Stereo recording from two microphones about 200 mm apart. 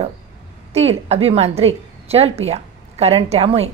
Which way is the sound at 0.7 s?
30° right (ahead or behind).